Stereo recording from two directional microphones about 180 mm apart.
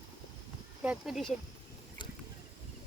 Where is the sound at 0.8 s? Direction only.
5° right (ahead or behind).